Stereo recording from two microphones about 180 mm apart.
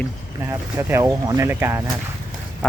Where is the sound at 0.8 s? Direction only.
15° right (ahead or behind).